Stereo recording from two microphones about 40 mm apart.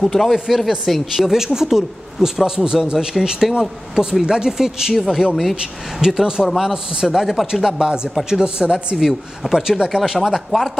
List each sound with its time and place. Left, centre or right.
0.0 s speech: centre
1.1 s speech: centre
5.3 s speech: centre
5.9 s speech: centre
7.8 s speech: centre